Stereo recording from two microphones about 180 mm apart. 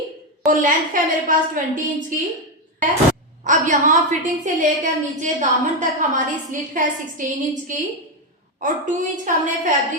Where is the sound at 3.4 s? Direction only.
45° right (ahead or behind).